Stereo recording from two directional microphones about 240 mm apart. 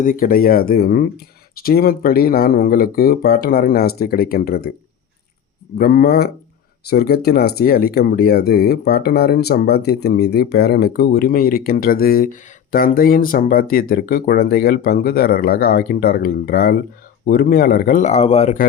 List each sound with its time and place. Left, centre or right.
0.0 s speech: left
5.7 s speech: left